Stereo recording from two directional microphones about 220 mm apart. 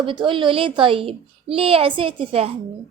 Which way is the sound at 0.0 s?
20° right (ahead or behind).